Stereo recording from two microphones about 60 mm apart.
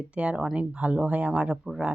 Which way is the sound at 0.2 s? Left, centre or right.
Centre.